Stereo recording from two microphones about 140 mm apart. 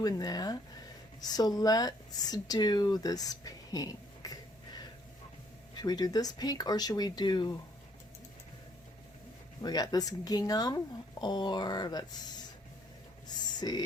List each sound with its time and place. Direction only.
0.0 s speech: 25° left (ahead or behind)
9.6 s speech: 30° left (ahead or behind)
13.2 s a sound: 30° left (ahead or behind)